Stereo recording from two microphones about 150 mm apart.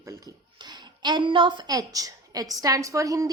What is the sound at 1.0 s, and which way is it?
A woman's voice, 30° right (ahead or behind).